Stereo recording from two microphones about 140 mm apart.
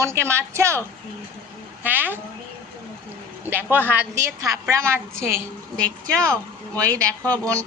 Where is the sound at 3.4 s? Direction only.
15° right (ahead or behind).